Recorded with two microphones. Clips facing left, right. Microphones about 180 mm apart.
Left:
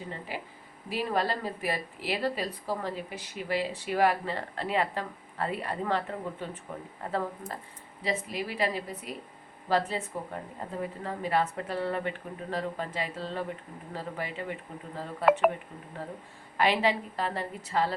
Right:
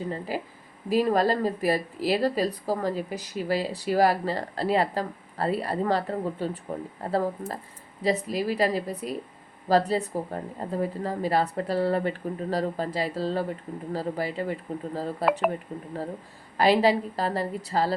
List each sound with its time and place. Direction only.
0.1 s speech: 40° right (ahead or behind)
15.2 s speech: centre (ahead or behind)
16.6 s speech: 35° right (ahead or behind)